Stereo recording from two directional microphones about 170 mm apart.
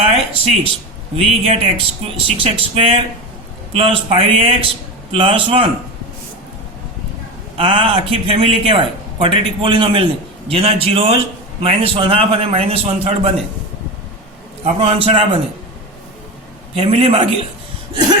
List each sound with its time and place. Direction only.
0.0 s a man's voice: 35° right (ahead or behind)
7.5 s a man's voice: 30° right (ahead or behind)
14.6 s a man's voice: 35° right (ahead or behind)
16.7 s a man's voice: 35° right (ahead or behind)